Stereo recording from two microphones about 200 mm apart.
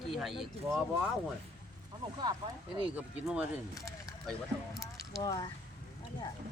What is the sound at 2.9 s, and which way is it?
Speech, 5° right (ahead or behind).